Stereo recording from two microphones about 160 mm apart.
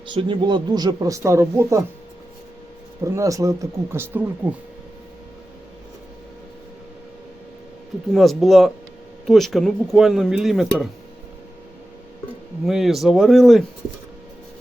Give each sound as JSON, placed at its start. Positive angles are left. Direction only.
{"t": 0.1, "sound": "speech", "side_deg": -30}
{"t": 3.0, "sound": "speech", "side_deg": -20}
{"t": 8.1, "sound": "speech", "side_deg": 0}
{"t": 12.6, "sound": "speech", "side_deg": 0}